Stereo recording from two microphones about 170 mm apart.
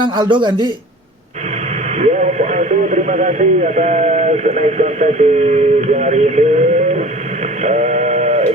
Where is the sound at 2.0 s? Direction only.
45° right (ahead or behind).